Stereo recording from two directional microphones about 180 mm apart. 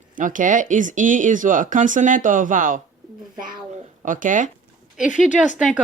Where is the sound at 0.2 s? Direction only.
45° right (ahead or behind).